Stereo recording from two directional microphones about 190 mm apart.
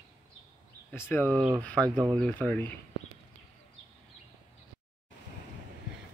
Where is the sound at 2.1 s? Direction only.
5° left (ahead or behind).